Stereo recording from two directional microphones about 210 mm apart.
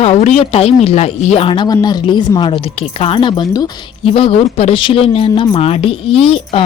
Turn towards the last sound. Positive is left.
turn(degrees=25)  # may be behind; listen again after turning